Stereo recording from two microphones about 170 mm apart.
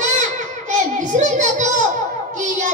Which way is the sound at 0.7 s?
45° right (ahead or behind).